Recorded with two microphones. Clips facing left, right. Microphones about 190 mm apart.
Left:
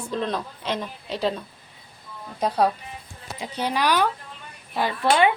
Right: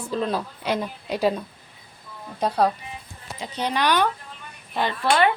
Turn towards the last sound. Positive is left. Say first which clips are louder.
# left 1 dB
turn(degrees=15)  # may be behind; listen again after turning